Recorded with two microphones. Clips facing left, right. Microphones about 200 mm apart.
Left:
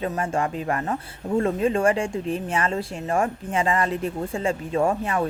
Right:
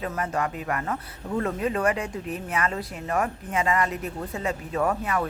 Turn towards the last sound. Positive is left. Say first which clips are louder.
# left 3 dB
turn(degrees=25)  # may be behind; listen again after turning